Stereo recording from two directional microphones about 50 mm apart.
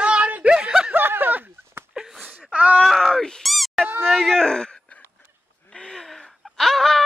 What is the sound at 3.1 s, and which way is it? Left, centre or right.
Groan, centre.